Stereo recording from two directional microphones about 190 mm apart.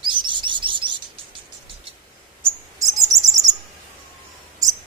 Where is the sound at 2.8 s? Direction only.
20° right (ahead or behind).